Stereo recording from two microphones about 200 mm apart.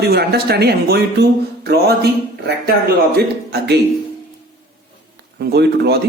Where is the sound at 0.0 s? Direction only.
55° right (ahead or behind).